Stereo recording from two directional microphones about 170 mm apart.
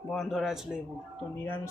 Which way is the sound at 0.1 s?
Centre (ahead or behind).